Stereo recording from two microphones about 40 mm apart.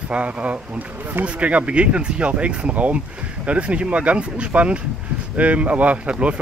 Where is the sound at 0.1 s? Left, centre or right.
Right.